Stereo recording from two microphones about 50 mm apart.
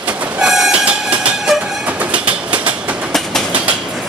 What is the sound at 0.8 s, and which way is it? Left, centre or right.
Train, right.